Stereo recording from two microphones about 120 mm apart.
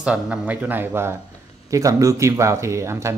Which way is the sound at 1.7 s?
25° right (ahead or behind).